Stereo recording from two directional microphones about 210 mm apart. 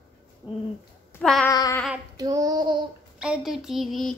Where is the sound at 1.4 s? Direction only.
15° left (ahead or behind).